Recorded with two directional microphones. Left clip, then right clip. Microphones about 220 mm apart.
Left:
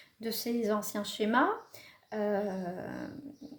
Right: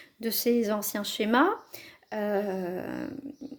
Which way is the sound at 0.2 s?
40° right (ahead or behind).